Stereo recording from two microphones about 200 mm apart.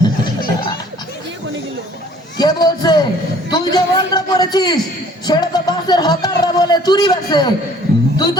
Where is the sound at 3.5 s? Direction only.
20° left (ahead or behind).